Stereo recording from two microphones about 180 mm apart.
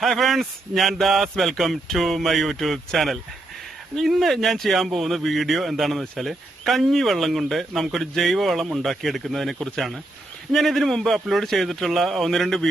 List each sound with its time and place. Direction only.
0.0 s speech: centre (ahead or behind)